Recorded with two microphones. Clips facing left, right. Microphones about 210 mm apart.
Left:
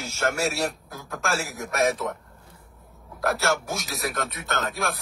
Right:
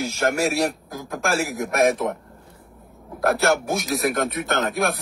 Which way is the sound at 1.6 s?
55° right (ahead or behind).